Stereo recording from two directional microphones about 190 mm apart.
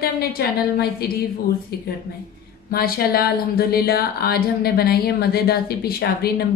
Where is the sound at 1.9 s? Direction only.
55° left (ahead or behind).